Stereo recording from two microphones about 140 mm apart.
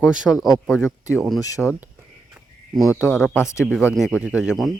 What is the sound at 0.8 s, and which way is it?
Speech, 25° left (ahead or behind).